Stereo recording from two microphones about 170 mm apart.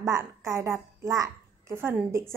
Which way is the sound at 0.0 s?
15° right (ahead or behind).